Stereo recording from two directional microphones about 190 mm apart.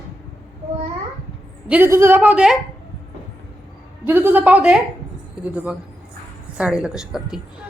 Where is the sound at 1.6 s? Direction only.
10° right (ahead or behind).